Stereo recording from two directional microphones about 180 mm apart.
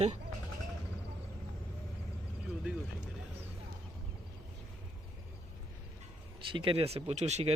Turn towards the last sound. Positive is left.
turn(degrees=-40)  # may be behind; listen again after turning